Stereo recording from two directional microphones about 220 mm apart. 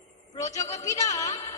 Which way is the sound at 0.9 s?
15° left (ahead or behind).